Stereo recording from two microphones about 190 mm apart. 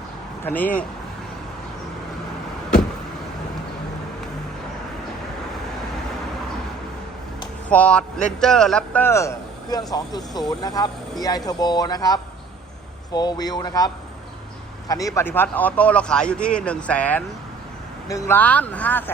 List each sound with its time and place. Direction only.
0.4 s a man's voice: 10° left (ahead or behind)
7.7 s a man's voice: 5° left (ahead or behind)